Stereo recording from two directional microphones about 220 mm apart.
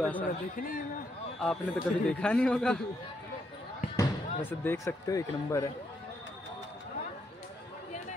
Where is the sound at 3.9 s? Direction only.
10° left (ahead or behind).